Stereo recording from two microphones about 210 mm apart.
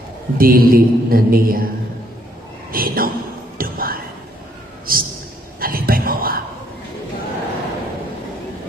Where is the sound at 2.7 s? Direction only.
45° right (ahead or behind).